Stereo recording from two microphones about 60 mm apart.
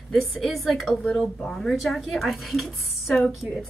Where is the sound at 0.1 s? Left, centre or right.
Centre.